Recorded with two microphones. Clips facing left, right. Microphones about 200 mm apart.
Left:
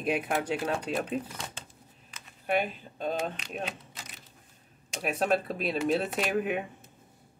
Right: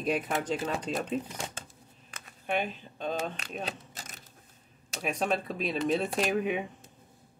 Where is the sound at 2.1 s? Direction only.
50° right (ahead or behind).